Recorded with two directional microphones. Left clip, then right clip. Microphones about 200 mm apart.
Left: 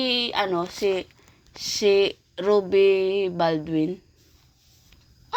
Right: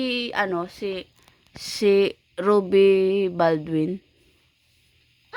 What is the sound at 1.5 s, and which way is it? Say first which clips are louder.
Speech: even; 45° right (ahead or behind).